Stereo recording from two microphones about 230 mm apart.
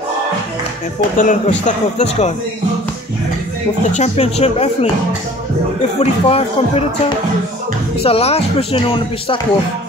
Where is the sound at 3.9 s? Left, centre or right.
Left.